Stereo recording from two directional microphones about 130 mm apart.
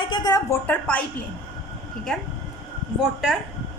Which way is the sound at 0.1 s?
30° left (ahead or behind).